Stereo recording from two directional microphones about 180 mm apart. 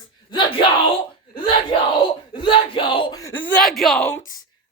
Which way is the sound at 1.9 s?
25° left (ahead or behind).